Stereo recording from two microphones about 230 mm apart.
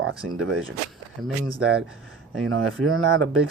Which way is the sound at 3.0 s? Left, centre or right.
Right.